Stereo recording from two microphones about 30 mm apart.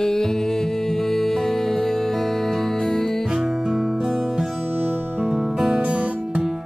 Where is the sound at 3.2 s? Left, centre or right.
Centre.